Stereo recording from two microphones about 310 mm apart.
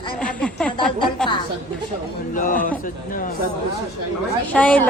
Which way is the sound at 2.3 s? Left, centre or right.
Left.